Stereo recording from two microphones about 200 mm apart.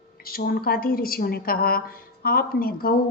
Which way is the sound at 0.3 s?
50° left (ahead or behind).